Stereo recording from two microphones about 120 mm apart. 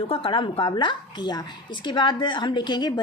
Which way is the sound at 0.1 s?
45° left (ahead or behind).